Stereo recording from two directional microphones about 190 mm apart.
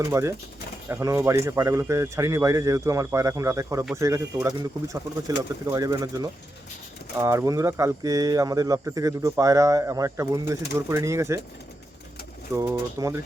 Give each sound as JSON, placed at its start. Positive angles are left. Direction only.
{"t": 0.0, "sound": "speech", "side_deg": -15}
{"t": 12.5, "sound": "speech", "side_deg": -15}